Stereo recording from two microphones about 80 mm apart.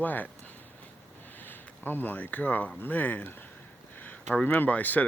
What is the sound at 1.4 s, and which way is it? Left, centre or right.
Speech, left.